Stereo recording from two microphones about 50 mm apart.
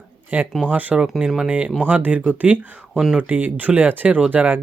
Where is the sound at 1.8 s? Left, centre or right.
Right.